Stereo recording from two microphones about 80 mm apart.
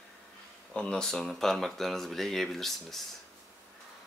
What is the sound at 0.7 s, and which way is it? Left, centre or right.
Speech, centre.